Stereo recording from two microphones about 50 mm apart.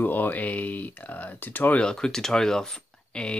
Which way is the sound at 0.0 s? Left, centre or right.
Left.